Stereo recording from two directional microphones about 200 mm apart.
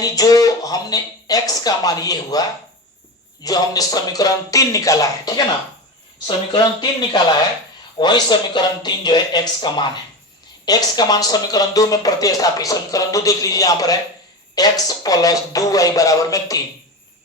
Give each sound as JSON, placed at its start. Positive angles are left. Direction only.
{"t": 0.0, "sound": "speech", "side_deg": 20}
{"t": 3.4, "sound": "speech", "side_deg": 20}